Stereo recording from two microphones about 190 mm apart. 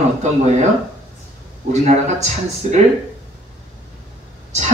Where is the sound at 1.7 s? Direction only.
40° right (ahead or behind).